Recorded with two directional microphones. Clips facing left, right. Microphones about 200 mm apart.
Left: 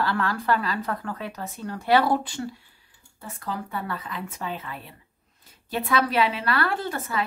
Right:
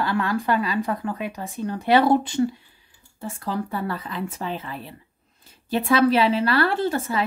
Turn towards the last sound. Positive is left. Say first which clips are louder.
# right 5 dB
turn(degrees=-30)  # may be behind; listen again after turning